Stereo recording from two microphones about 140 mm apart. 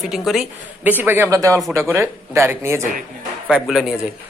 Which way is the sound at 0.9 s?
15° right (ahead or behind).